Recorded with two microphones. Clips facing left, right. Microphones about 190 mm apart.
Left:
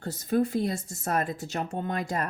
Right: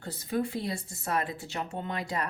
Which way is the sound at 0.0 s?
45° left (ahead or behind).